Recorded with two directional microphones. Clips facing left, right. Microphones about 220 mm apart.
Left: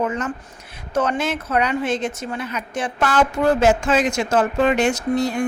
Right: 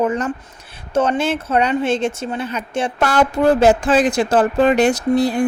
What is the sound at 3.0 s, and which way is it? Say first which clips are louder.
Speech: right 2 dB; 40° right (ahead or behind).